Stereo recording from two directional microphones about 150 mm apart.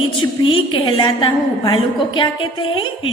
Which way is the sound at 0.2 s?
35° left (ahead or behind).